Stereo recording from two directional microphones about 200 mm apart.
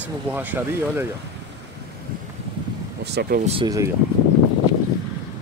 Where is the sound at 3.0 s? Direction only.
55° right (ahead or behind).